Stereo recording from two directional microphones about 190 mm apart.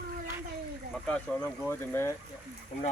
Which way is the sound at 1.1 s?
5° left (ahead or behind).